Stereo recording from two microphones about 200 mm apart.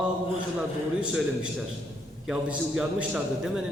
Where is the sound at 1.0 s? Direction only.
5° right (ahead or behind).